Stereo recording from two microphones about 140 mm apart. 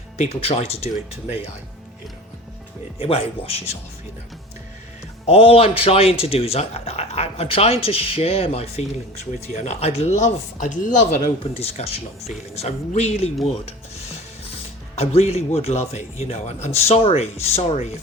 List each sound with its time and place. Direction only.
0.2 s speech: 50° left (ahead or behind)
3.0 s speech: 45° left (ahead or behind)
5.2 s speech: 45° left (ahead or behind)
13.5 s rub: 45° left (ahead or behind)
14.9 s speech: 45° left (ahead or behind)